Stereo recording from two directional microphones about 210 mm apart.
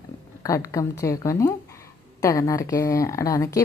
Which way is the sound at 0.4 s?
15° left (ahead or behind).